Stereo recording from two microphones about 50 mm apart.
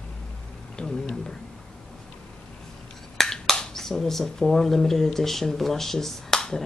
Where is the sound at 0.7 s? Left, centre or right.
Centre.